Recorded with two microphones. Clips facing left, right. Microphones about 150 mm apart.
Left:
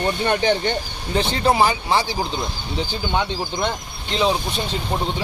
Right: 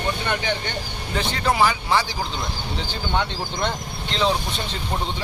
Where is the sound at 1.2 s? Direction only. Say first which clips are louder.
Left 3 dB; 25° left (ahead or behind).